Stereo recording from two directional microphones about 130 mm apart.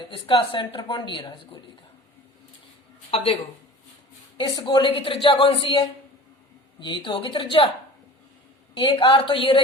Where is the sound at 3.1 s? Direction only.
45° left (ahead or behind).